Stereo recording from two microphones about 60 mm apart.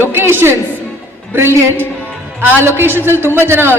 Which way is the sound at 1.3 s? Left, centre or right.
Right.